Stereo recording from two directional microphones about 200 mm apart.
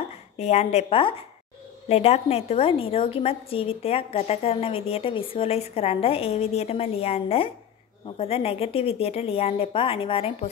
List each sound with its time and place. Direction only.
0.4 s a woman's voice: 35° left (ahead or behind)